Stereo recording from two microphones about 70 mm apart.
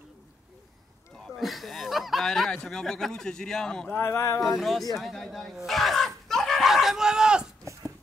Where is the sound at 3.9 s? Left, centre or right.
Left.